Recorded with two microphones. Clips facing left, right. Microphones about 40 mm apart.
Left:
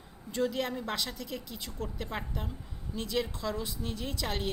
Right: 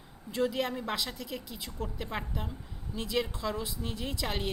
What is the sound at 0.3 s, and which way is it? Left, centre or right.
A woman's voice, centre.